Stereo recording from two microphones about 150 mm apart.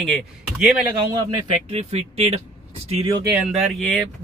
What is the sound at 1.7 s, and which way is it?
Speech, 45° right (ahead or behind).